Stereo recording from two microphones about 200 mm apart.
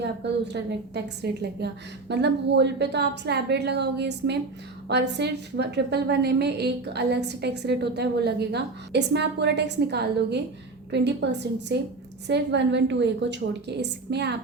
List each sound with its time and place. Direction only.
0.0 s a woman's voice: 60° right (ahead or behind)